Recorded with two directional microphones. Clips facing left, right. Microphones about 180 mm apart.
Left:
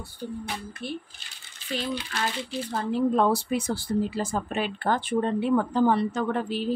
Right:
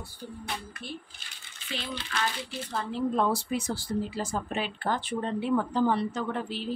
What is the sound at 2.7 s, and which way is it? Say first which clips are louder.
Speech: left 5 dB; 45° left (ahead or behind).